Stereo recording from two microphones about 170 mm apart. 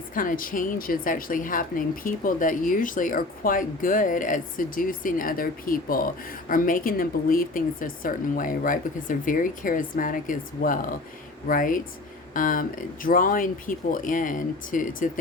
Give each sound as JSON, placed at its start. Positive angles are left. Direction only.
{"t": 0.1, "sound": "a woman's voice", "side_deg": 55}